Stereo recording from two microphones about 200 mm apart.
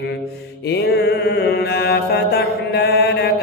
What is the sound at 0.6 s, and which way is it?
Mantra, 55° left (ahead or behind).